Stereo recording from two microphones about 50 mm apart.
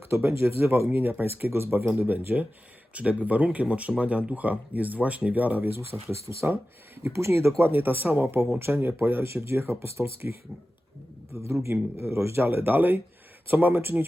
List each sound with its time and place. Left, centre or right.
0.1 s speech: right
1.9 s speech: right
5.9 s speech: centre
6.4 s speech: right
7.1 s speech: right
7.6 s speech: right
11.4 s a man's voice: right
12.5 s speech: right